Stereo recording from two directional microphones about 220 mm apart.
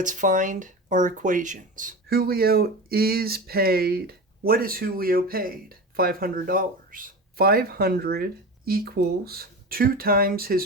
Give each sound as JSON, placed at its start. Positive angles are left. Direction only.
{"t": 0.0, "sound": "speech", "side_deg": -35}